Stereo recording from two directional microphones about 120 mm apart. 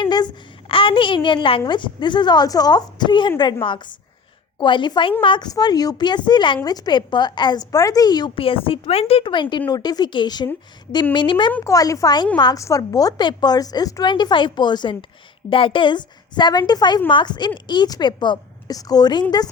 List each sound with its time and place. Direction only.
0.0 s a sound: 35° left (ahead or behind)
0.7 s a woman's voice: 45° left (ahead or behind)
8.4 s a woman's voice: 50° left (ahead or behind)
11.6 s a woman's voice: 30° left (ahead or behind)